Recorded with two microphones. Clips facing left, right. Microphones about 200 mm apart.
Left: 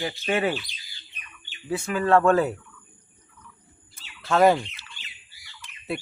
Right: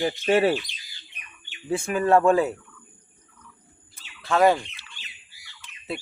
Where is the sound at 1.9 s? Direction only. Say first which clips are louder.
Right 1 dB; 20° right (ahead or behind).